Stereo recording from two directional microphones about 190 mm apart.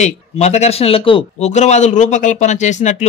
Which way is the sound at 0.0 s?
35° left (ahead or behind).